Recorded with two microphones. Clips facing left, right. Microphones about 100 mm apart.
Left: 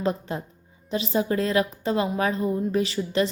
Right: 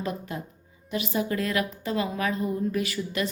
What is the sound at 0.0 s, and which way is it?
A woman's voice, 30° left (ahead or behind).